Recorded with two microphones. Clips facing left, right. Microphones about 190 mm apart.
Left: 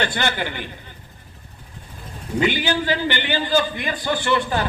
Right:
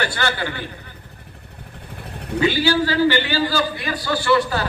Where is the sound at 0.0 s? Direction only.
20° left (ahead or behind).